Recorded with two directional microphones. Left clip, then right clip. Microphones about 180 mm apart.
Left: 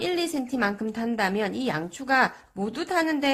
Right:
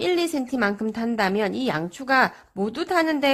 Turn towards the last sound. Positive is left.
turn(degrees=-25)  # may be behind; listen again after turning